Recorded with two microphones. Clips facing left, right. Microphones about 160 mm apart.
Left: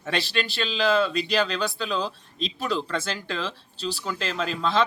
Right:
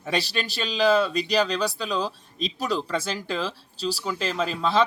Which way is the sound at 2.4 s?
40° right (ahead or behind).